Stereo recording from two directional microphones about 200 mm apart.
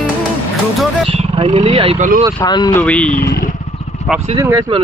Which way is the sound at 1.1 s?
30° right (ahead or behind).